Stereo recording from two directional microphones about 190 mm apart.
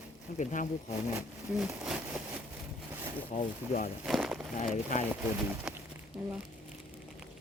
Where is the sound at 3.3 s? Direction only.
40° left (ahead or behind).